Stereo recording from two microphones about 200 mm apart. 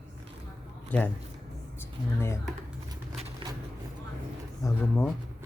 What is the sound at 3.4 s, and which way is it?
Vehicle, 25° right (ahead or behind).